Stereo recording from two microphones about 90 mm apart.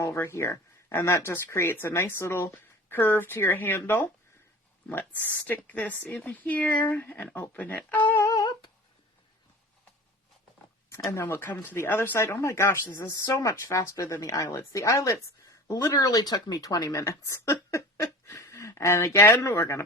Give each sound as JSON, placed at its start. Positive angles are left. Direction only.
{"t": 0.0, "sound": "speech", "side_deg": 30}
{"t": 8.2, "sound": "humming", "side_deg": 40}
{"t": 11.1, "sound": "speech", "side_deg": 30}